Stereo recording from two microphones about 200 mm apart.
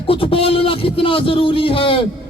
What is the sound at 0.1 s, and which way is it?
Speech, 25° left (ahead or behind).